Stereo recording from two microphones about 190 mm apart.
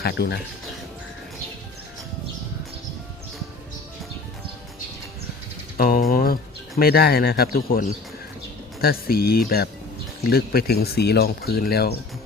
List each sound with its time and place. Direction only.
0.0 s speech: 60° left (ahead or behind)
5.7 s speech: 50° left (ahead or behind)